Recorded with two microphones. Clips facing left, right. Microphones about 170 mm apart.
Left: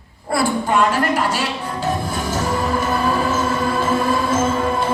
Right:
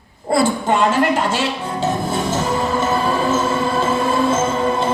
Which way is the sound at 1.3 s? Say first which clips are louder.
Right 2 dB; 25° right (ahead or behind).